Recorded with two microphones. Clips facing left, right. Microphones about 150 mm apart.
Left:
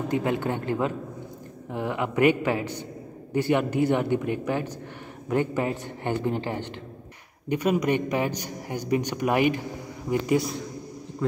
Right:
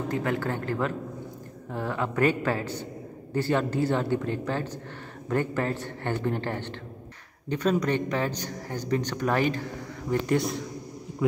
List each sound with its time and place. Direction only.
0.1 s a man's voice: 20° left (ahead or behind); by 10.6 s centre (ahead or behind)